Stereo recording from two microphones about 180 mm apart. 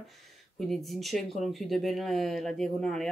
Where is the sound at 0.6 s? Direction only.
Centre (ahead or behind).